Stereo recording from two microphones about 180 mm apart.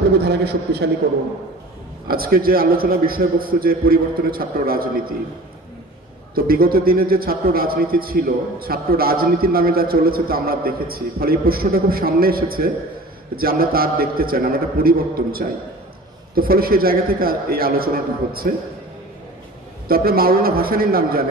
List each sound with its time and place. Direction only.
0.2 s a man's voice: 65° right (ahead or behind)
2.0 s a man's voice: 55° right (ahead or behind)
6.3 s a man's voice: 55° right (ahead or behind)
19.9 s a man's voice: 55° right (ahead or behind)